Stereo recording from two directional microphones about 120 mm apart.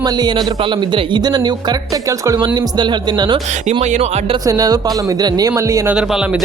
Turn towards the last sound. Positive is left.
turn(degrees=-5)  # may be behind; listen again after turning